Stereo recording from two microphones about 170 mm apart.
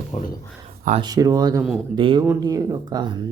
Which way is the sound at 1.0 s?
20° right (ahead or behind).